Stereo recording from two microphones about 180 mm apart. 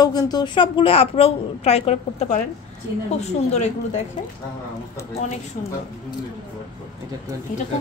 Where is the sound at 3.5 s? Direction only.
40° left (ahead or behind).